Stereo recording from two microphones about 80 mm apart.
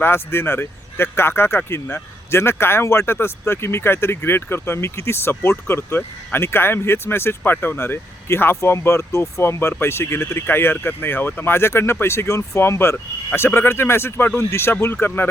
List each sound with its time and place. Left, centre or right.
0.0 s speech: left